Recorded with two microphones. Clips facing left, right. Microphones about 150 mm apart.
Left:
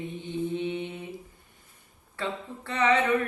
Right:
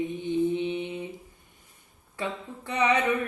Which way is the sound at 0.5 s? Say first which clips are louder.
Right 1 dB; 20° right (ahead or behind).